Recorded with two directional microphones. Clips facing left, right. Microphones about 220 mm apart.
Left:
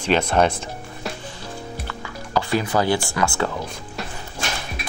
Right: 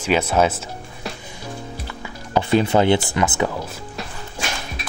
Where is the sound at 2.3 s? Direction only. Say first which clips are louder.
Right 4 dB; 20° right (ahead or behind).